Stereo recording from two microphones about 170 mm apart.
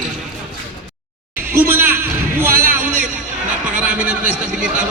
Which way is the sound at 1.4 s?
15° right (ahead or behind).